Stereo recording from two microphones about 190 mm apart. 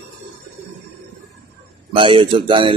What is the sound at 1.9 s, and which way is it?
Speech, 25° right (ahead or behind).